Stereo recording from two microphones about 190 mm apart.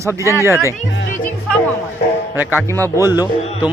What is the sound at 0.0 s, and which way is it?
Speech, 15° right (ahead or behind).